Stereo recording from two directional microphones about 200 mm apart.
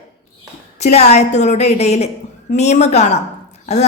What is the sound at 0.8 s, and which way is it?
A woman's voice, 35° left (ahead or behind).